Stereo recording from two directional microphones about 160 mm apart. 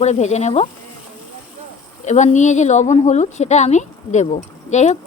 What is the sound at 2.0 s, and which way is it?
Speech, 45° left (ahead or behind).